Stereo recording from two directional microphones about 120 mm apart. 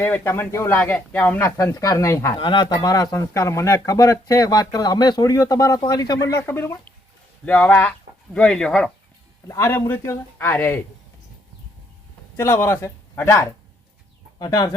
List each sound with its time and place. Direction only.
0.0 s speech: 20° left (ahead or behind)
2.3 s speech: 40° left (ahead or behind); by 8.9 s 5° left (ahead or behind)
9.5 s speech: 25° left (ahead or behind)
12.4 s speech: 20° left (ahead or behind)
14.3 s speech: 35° left (ahead or behind)